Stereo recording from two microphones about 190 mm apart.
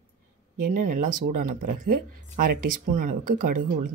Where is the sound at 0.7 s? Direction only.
45° right (ahead or behind).